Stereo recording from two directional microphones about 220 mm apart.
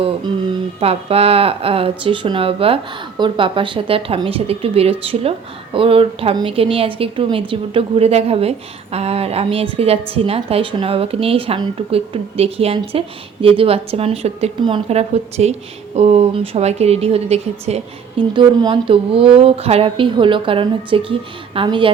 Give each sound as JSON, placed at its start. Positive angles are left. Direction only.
{"t": 0.8, "sound": "a woman's voice", "side_deg": -25}